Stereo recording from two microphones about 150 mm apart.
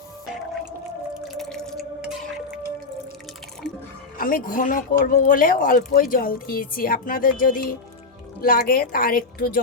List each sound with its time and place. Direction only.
1.3 s drip: centre (ahead or behind)
4.2 s speech: 70° left (ahead or behind)